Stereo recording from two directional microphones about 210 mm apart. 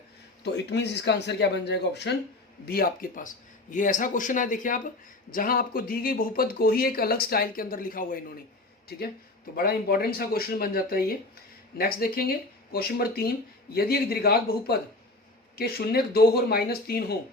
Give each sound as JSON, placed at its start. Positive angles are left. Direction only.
{"t": 0.4, "sound": "speech", "side_deg": 55}
{"t": 9.6, "sound": "speech", "side_deg": 45}